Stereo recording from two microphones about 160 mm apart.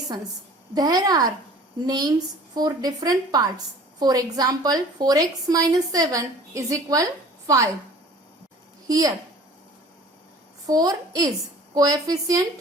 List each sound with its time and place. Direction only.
0.7 s a woman's voice: 25° right (ahead or behind)
8.9 s a woman's voice: 20° right (ahead or behind)
10.7 s a woman's voice: 20° right (ahead or behind)